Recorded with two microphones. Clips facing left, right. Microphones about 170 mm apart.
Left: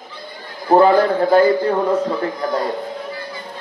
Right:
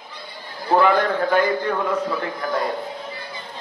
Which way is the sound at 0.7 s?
35° left (ahead or behind).